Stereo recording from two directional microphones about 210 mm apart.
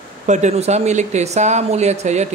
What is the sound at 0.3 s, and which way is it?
Speech, 35° right (ahead or behind).